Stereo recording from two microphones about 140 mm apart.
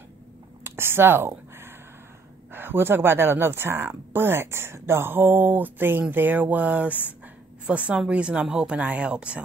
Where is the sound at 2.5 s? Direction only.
15° right (ahead or behind).